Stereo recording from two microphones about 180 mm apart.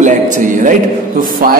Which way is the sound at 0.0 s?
45° right (ahead or behind).